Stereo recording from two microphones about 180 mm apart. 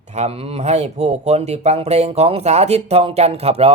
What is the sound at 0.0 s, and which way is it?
A man's voice, 40° right (ahead or behind).